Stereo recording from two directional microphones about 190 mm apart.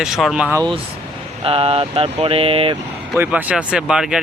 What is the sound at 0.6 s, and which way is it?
Speech, 25° right (ahead or behind).